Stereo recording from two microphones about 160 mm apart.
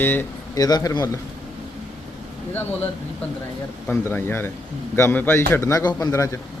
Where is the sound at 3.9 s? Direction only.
15° left (ahead or behind).